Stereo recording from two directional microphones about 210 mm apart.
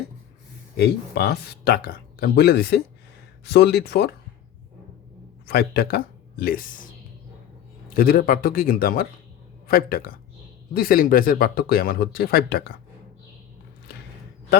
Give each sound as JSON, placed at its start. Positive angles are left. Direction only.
{"t": 0.8, "sound": "speech", "side_deg": 50}
{"t": 5.5, "sound": "speech", "side_deg": 45}
{"t": 7.9, "sound": "speech", "side_deg": 45}